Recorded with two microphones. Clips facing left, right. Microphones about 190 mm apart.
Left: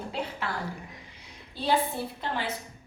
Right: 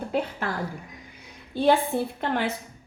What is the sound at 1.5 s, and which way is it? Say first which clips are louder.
Speech: right 6 dB; 55° right (ahead or behind).